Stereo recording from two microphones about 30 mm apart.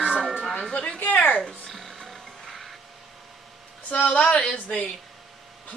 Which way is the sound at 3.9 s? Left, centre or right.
Left.